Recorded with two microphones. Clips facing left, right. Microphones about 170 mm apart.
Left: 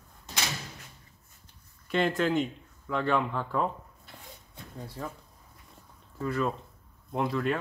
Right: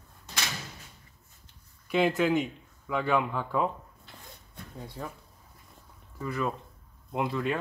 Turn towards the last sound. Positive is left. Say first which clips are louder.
# left 1 dB
turn(degrees=0)  # may be behind; listen again after turning